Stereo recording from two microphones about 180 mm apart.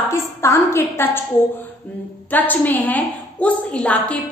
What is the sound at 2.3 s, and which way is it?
A woman's voice, 10° left (ahead or behind).